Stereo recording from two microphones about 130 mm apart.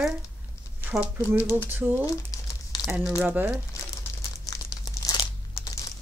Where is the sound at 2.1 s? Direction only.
25° left (ahead or behind).